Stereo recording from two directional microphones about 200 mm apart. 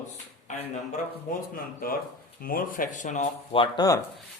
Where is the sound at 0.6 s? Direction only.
35° left (ahead or behind); by 4.0 s 20° left (ahead or behind).